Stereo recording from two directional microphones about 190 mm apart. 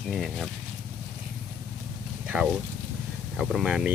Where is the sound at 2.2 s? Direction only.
5° right (ahead or behind).